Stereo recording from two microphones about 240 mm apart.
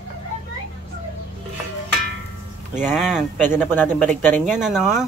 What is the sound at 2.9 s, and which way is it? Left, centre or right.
Speech, centre.